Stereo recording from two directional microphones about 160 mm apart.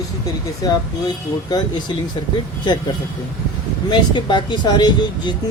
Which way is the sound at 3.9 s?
30° left (ahead or behind).